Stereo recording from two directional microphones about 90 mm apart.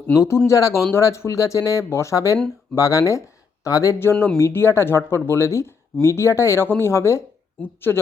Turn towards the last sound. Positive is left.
turn(degrees=25)  # may be behind; listen again after turning